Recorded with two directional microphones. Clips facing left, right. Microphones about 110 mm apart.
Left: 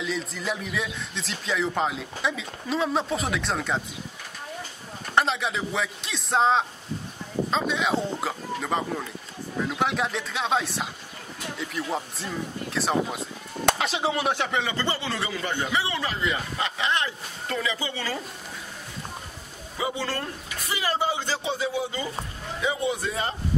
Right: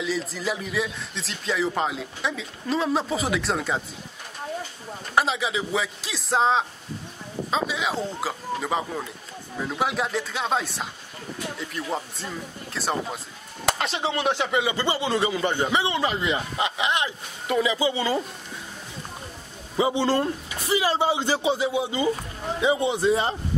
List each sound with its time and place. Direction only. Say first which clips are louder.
0.0 s speech: right 2 dB; centre (ahead or behind)
5.1 s speech: right 1 dB; 5° right (ahead or behind)
19.8 s a man's voice: right 8 dB; 25° right (ahead or behind)